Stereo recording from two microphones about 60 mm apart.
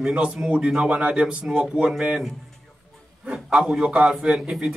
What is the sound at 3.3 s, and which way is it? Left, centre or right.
A man's voice, centre.